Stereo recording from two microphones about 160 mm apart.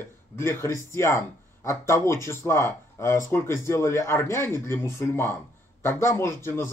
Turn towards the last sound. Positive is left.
turn(degrees=15)  # may be behind; listen again after turning